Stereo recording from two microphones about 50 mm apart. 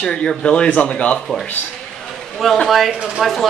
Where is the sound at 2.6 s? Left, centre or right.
Centre.